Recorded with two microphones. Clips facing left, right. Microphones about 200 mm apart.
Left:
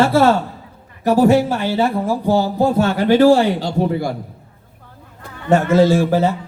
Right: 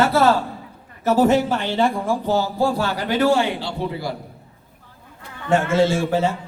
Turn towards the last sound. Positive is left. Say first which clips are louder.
# left 5 dB
turn(degrees=35)  # may be behind; listen again after turning